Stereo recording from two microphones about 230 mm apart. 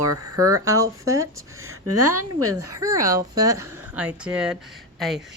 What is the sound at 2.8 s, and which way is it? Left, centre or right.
Speech, centre.